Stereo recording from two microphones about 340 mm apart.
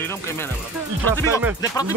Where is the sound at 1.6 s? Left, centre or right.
Centre.